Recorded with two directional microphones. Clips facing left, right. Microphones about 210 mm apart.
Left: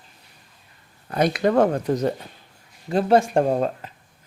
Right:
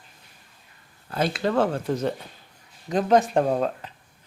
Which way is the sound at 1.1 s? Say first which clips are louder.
Left 5 dB; 15° left (ahead or behind).